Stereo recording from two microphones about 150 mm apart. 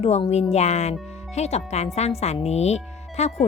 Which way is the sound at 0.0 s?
45° left (ahead or behind).